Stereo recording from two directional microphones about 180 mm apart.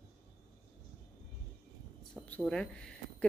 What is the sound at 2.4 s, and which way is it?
Speech, 5° left (ahead or behind).